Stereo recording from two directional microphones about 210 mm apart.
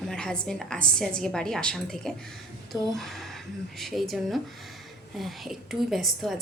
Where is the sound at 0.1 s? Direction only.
5° left (ahead or behind).